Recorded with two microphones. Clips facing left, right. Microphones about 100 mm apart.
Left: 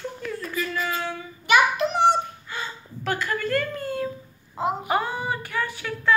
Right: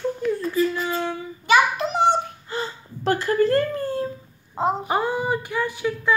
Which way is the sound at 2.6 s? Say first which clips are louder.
Right 5 dB; 35° right (ahead or behind).